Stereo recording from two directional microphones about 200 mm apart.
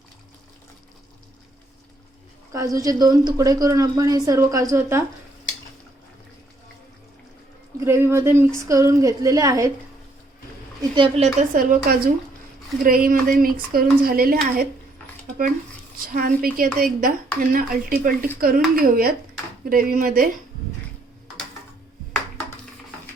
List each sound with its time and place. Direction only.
2.5 s a woman's voice: 15° right (ahead or behind)
7.9 s a woman's voice: 15° right (ahead or behind)
10.9 s a woman's voice: 30° right (ahead or behind); by 14.7 s 45° right (ahead or behind)
16.1 s speech: 45° right (ahead or behind)